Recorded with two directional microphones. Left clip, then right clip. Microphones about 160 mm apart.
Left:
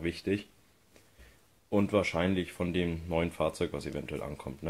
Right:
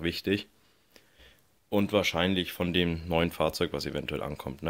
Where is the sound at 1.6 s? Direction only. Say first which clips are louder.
Right 2 dB; 10° right (ahead or behind).